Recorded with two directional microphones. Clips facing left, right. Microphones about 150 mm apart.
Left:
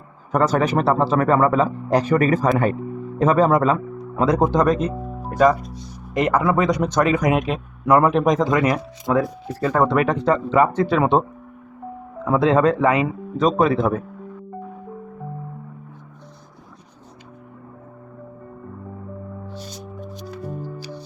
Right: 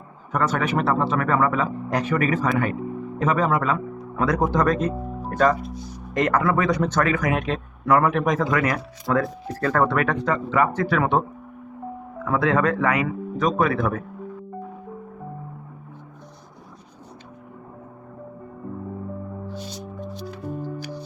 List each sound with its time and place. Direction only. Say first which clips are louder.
0.3 s speech: left 5 dB; 35° left (ahead or behind)
12.2 s speech: left 4 dB; 25° left (ahead or behind)